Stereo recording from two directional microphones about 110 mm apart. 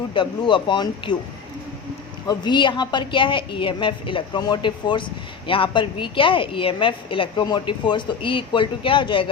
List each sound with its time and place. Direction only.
0.1 s a woman's voice: 50° left (ahead or behind)
2.2 s a woman's voice: 45° left (ahead or behind)